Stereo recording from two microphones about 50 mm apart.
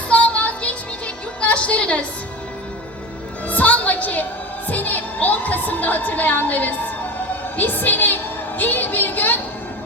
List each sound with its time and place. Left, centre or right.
0.1 s music: left
3.4 s music: left
4.7 s a woman's voice: left